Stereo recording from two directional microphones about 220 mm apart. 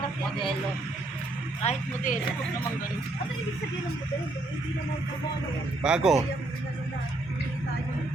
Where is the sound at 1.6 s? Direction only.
35° left (ahead or behind).